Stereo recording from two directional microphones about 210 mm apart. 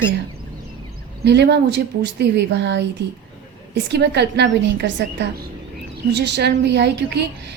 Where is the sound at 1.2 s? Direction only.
55° right (ahead or behind).